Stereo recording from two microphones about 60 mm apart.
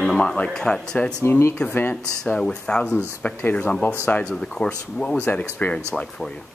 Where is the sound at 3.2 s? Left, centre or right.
Left.